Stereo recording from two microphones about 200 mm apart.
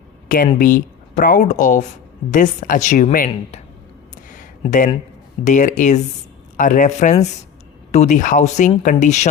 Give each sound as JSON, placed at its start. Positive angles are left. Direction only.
{"t": 0.3, "sound": "speech", "side_deg": 45}
{"t": 5.5, "sound": "speech", "side_deg": 40}